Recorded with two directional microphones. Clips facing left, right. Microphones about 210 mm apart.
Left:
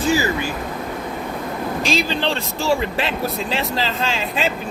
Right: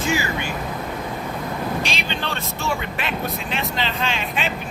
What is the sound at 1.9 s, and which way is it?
Speech, 40° left (ahead or behind).